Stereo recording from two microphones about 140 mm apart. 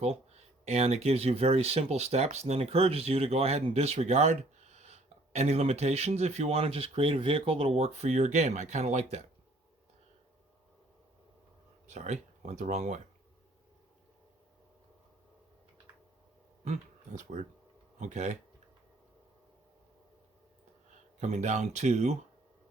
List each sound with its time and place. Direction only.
0.0 s speech: 50° right (ahead or behind)
11.9 s speech: 55° right (ahead or behind)
16.6 s speech: 60° right (ahead or behind)
21.2 s speech: 55° right (ahead or behind)